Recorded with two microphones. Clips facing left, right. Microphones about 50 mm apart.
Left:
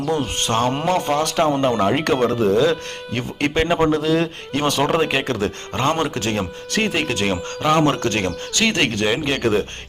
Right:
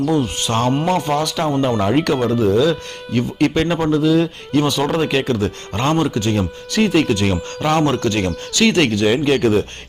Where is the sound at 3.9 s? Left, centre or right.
Left.